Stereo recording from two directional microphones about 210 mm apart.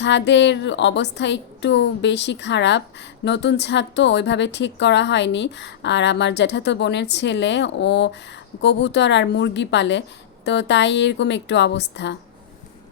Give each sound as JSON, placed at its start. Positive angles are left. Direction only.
{"t": 0.0, "sound": "speech", "side_deg": 55}